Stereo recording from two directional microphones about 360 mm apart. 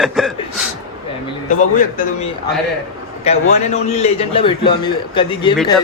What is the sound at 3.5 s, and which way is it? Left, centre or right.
Speech, centre.